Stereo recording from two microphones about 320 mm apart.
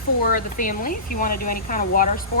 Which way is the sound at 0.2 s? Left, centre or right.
Left.